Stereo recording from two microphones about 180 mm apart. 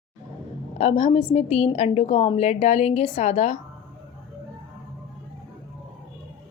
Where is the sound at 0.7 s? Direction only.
35° left (ahead or behind).